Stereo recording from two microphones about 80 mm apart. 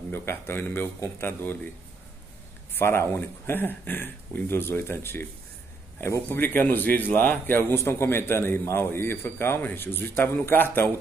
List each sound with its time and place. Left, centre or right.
0.1 s a man's voice: left
2.7 s a man's voice: left
6.3 s a man's voice: left